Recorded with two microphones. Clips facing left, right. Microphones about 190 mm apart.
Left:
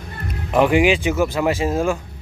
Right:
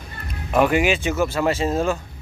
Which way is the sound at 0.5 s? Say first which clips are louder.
Left 3 dB; 15° left (ahead or behind).